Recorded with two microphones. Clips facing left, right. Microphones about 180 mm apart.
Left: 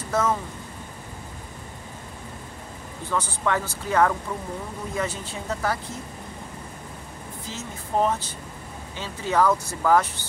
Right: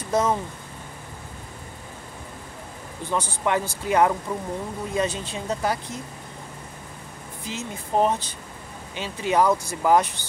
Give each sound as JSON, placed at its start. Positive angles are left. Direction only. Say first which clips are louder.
{"t": 0.1, "sound": "speech", "louder": "right 2 dB", "side_deg": -15}
{"t": 3.1, "sound": "speech", "louder": "right 1 dB", "side_deg": -20}
{"t": 7.4, "sound": "speech", "louder": "right 5 dB", "side_deg": -15}